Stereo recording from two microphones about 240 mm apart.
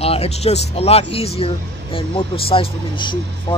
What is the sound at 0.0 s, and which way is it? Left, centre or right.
Speech, left.